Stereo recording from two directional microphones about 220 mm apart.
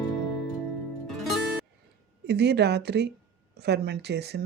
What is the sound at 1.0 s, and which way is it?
Music, centre (ahead or behind).